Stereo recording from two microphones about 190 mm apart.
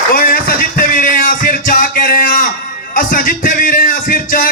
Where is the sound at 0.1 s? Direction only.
45° left (ahead or behind).